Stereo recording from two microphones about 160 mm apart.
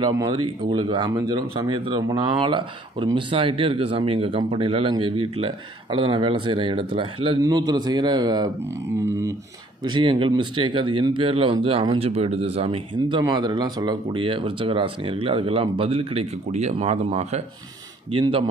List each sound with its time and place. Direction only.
0.0 s speech: 25° right (ahead or behind)
9.8 s speech: 30° right (ahead or behind)